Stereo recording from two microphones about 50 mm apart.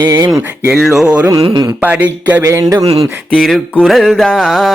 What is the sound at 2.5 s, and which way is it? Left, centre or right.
Speech, right.